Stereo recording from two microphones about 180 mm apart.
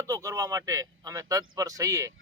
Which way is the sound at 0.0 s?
15° right (ahead or behind).